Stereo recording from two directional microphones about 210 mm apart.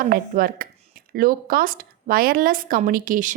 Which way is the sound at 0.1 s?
45° right (ahead or behind).